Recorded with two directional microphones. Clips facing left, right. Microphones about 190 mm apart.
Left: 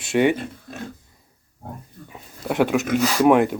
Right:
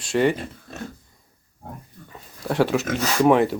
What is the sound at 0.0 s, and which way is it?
Speech, 5° left (ahead or behind).